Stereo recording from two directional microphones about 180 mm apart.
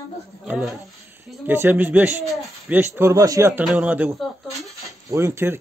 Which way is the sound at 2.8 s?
15° right (ahead or behind).